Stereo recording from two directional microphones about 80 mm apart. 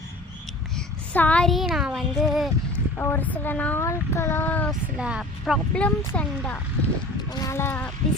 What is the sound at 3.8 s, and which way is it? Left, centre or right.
Speech, left.